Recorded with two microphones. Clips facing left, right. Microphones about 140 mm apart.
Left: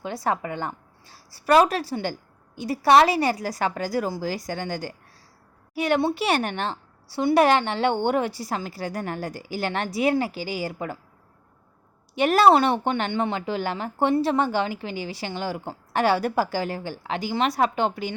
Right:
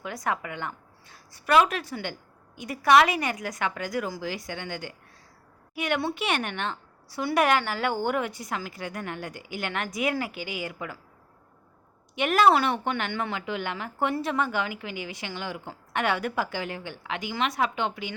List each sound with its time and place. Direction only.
0.0 s speech: 30° left (ahead or behind)
12.1 s speech: 35° left (ahead or behind)